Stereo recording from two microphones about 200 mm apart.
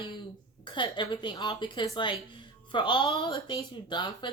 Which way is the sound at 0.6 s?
25° left (ahead or behind).